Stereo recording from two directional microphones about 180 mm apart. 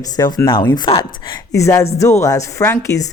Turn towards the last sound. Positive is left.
turn(degrees=15)  # may be behind; listen again after turning